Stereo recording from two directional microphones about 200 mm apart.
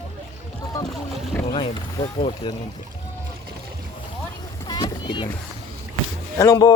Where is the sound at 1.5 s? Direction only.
30° left (ahead or behind).